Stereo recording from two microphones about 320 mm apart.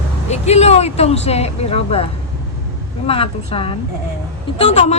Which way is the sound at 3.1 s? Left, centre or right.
Centre.